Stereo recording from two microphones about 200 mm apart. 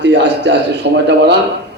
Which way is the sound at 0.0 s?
60° right (ahead or behind).